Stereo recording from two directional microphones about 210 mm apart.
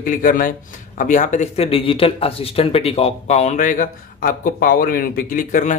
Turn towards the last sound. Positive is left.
turn(degrees=35)  # may be behind; listen again after turning